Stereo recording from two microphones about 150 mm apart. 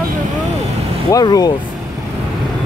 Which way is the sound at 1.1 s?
25° left (ahead or behind).